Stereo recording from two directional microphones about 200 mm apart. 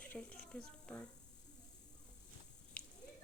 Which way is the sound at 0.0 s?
5° left (ahead or behind).